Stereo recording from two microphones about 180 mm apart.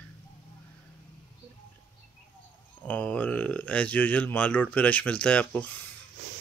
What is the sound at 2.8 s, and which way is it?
Speech, 10° left (ahead or behind).